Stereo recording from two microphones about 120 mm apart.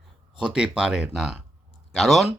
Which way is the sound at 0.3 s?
5° right (ahead or behind).